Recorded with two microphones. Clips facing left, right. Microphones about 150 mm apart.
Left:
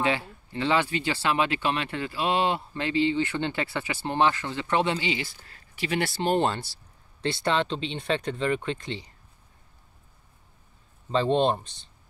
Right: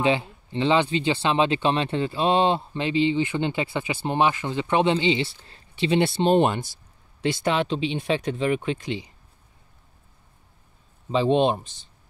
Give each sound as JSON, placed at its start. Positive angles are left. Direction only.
{"t": 0.0, "sound": "speech", "side_deg": -20}
{"t": 11.1, "sound": "speech", "side_deg": -15}